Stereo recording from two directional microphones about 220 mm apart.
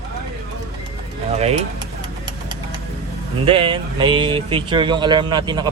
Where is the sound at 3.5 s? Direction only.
25° right (ahead or behind).